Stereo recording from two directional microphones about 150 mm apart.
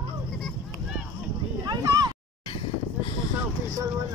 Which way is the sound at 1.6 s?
25° right (ahead or behind).